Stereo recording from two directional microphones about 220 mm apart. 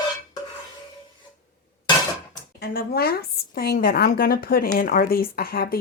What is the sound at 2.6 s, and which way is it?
A woman's voice, 45° left (ahead or behind).